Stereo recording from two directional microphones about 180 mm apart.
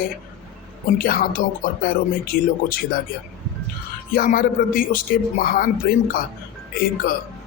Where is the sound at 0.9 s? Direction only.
55° left (ahead or behind).